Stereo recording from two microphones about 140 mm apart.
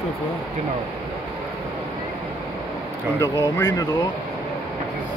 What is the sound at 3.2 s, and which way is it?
Speech, 20° left (ahead or behind).